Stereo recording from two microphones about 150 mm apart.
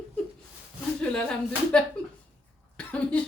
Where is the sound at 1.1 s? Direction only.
5° left (ahead or behind).